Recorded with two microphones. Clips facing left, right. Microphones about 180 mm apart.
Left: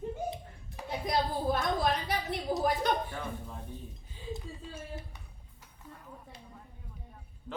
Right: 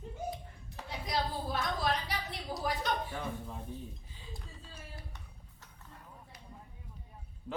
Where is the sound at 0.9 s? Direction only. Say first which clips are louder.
Left 4 dB; 50° left (ahead or behind).